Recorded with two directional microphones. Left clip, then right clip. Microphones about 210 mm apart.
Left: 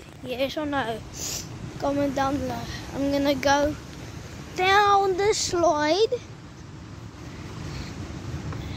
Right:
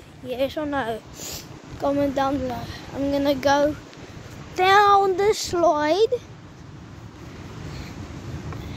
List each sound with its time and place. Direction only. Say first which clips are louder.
0.3 s speech: right 2 dB; 15° right (ahead or behind)
1.2 s speech: left 2 dB; 25° right (ahead or behind)
2.9 s speech: right 2 dB; 5° right (ahead or behind)
4.6 s speech: right 3 dB; 30° right (ahead or behind); by 6.2 s 15° right (ahead or behind)